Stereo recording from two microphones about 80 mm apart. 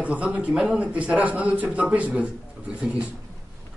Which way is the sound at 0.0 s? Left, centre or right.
Centre.